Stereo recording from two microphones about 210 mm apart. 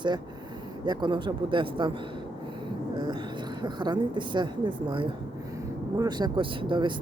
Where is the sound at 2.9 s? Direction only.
20° right (ahead or behind).